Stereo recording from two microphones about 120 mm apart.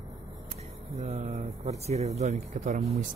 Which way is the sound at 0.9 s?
80° right.